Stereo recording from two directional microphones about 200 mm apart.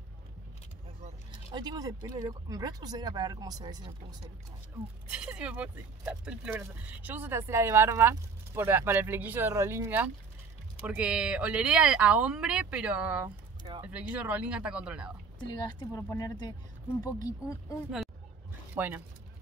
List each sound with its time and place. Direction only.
1.5 s speech: 20° right (ahead or behind)
5.1 s speech: 5° right (ahead or behind)
15.4 s speech: 20° left (ahead or behind)
18.8 s speech: 10° right (ahead or behind)